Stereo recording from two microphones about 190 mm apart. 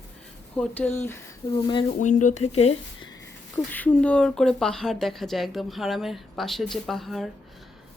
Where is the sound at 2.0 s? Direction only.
40° left (ahead or behind).